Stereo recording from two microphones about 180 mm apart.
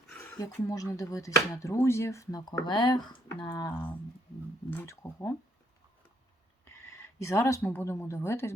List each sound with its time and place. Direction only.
0.1 s a sound: 10° left (ahead or behind)
0.3 s speech: 20° left (ahead or behind)
3.7 s speech: 10° left (ahead or behind)
6.7 s speech: 15° left (ahead or behind)